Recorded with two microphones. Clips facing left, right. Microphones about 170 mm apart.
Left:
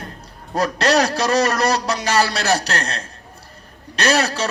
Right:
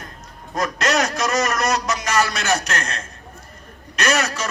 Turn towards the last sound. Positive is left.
turn(degrees=30)  # may be behind; listen again after turning